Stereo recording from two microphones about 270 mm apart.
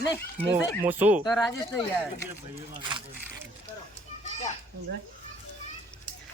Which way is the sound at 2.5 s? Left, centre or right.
Centre.